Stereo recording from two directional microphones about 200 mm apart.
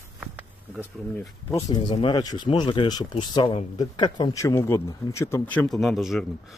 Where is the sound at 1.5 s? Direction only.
20° left (ahead or behind); by 6.2 s centre (ahead or behind).